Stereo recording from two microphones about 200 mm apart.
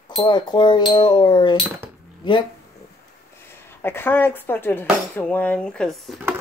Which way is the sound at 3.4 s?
10° left (ahead or behind).